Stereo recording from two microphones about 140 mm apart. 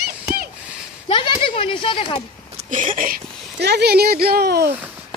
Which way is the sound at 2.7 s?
70° right (ahead or behind).